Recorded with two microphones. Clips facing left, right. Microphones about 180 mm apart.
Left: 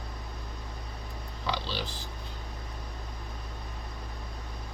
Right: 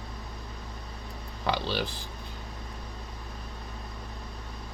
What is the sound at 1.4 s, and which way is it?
Speech, 55° right (ahead or behind).